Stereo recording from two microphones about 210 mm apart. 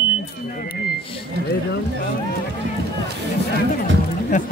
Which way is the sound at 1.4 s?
50° right (ahead or behind).